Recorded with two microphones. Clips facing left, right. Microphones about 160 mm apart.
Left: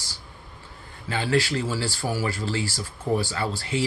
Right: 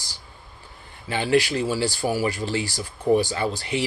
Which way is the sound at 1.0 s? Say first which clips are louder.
Right 3 dB; 15° right (ahead or behind).